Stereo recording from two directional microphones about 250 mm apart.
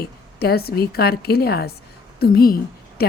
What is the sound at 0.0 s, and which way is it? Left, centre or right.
A woman's voice, left.